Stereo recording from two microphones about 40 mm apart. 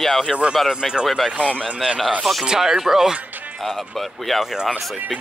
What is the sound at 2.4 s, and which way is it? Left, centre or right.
Speech, centre.